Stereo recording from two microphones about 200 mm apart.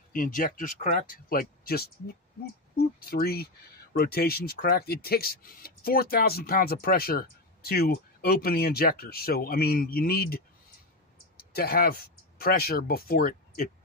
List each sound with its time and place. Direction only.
0.1 s speech: 45° left (ahead or behind)
2.7 s a sound: 50° left (ahead or behind)
3.9 s speech: 50° left (ahead or behind)
11.5 s speech: 50° left (ahead or behind)